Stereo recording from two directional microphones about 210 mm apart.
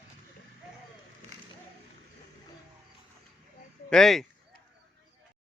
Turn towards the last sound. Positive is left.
turn(degrees=0)  # may be behind; listen again after turning